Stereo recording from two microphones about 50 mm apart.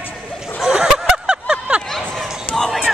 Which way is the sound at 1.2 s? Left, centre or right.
Right.